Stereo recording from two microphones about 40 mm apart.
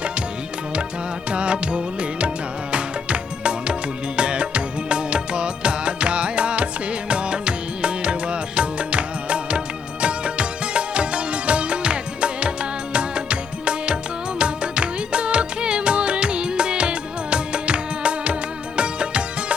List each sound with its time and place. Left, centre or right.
1.3 s music: right